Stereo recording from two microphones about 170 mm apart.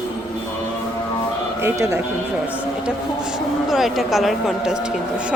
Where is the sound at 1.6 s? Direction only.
15° right (ahead or behind).